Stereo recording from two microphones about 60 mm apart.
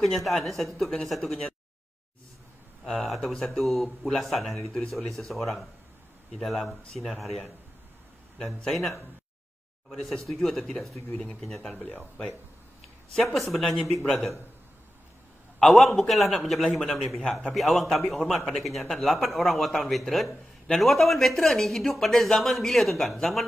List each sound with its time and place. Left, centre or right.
0.0 s speech: centre
3.1 s speech: centre
8.7 s speech: centre
11.7 s a man's voice: centre
13.1 s speech: centre
15.6 s a man's voice: centre
17.6 s speech: centre